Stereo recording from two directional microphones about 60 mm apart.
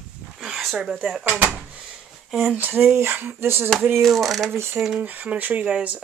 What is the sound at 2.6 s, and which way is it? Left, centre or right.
Speech, right.